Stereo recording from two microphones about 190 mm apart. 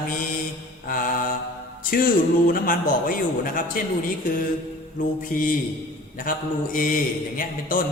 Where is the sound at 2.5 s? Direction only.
50° left (ahead or behind).